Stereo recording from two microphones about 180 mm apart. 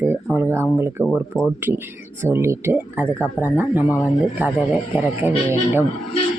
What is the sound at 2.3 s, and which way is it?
Speech, 15° right (ahead or behind).